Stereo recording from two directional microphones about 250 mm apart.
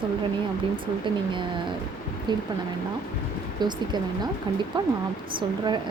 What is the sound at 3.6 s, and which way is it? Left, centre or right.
Speech, centre.